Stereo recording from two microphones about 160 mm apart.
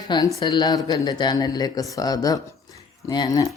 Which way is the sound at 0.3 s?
25° left (ahead or behind).